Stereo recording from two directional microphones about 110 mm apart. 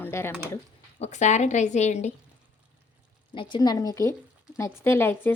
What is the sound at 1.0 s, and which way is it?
A woman's voice, 90° left.